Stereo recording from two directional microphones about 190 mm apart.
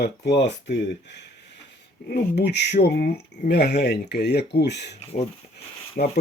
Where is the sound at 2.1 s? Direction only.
60° left (ahead or behind).